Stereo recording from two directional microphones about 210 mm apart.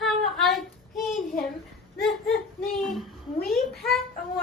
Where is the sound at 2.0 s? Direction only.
Centre (ahead or behind).